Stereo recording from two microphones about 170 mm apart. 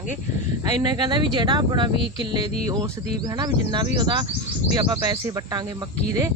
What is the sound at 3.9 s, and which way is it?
Speech, 25° right (ahead or behind).